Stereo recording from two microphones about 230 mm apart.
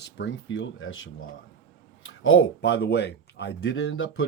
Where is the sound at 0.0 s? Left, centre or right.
Left.